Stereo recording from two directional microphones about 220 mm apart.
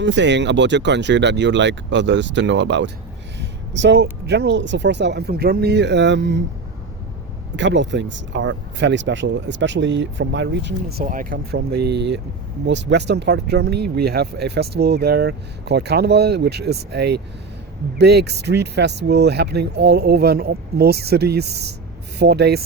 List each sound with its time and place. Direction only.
0.0 s speech: 55° right (ahead or behind)
7.5 s speech: 55° right (ahead or behind)